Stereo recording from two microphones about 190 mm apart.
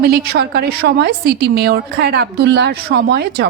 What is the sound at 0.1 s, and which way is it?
A woman's voice, 60° right (ahead or behind).